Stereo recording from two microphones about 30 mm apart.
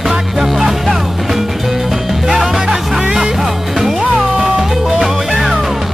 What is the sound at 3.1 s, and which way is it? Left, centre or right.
Music, right.